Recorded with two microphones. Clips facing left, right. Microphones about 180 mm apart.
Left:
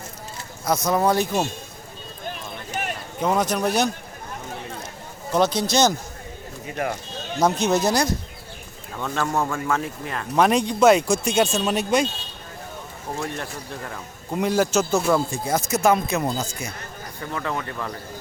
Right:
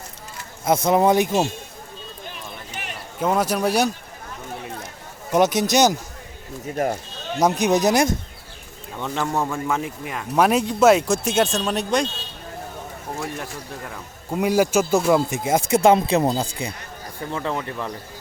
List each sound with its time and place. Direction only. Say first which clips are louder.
0.6 s speech: right 3 dB; 25° right (ahead or behind)
2.8 s run: left 8 dB; 45° left (ahead or behind)
3.2 s speech: right 1 dB; 5° right (ahead or behind)
5.3 s speech: right 2 dB; 20° right (ahead or behind)
6.8 s speech: right 4 dB; 40° right (ahead or behind)
7.3 s speech: right 2 dB; 15° right (ahead or behind); by 12.0 s 5° left (ahead or behind)
13.1 s speech: left 1 dB; 5° right (ahead or behind)